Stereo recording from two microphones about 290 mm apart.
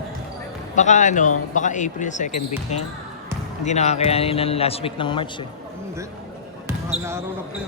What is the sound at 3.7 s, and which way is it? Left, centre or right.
A man's voice, left.